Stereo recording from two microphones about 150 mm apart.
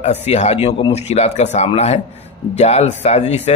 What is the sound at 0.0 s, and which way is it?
Speech, 45° left (ahead or behind).